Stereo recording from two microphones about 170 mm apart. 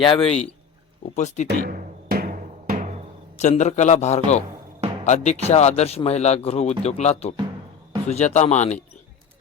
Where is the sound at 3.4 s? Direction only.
45° left (ahead or behind).